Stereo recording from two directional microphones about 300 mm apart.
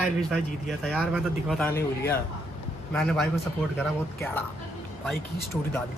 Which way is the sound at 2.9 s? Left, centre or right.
Centre.